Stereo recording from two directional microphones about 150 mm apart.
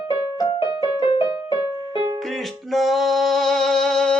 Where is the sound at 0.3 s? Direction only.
30° left (ahead or behind).